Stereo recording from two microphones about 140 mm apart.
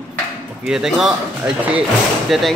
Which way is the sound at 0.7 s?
5° right (ahead or behind).